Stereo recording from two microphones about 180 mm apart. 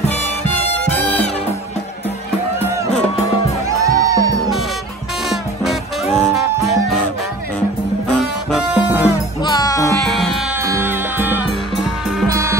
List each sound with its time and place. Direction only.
3.6 s music: 20° right (ahead or behind)
5.3 s music: centre (ahead or behind)
8.1 s music: centre (ahead or behind)
9.4 s music: 20° left (ahead or behind)
10.0 s music: centre (ahead or behind)
10.6 s music: 15° right (ahead or behind)